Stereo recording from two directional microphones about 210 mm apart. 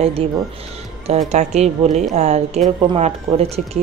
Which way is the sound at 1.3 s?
30° right (ahead or behind).